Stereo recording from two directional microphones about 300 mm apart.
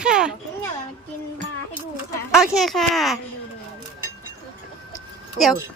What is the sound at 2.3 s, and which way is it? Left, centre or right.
Speech, centre.